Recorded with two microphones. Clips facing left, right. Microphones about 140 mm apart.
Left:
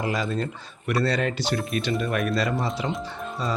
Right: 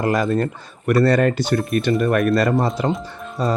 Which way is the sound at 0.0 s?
50° right (ahead or behind).